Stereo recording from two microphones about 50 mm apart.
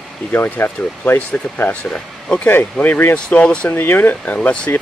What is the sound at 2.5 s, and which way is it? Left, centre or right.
Speech, left.